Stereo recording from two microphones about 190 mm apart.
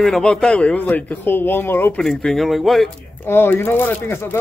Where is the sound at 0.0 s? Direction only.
5° left (ahead or behind).